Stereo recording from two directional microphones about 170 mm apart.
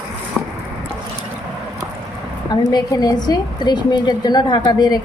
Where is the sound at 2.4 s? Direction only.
25° left (ahead or behind).